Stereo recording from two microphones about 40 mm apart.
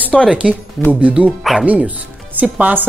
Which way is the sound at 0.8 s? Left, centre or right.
Right.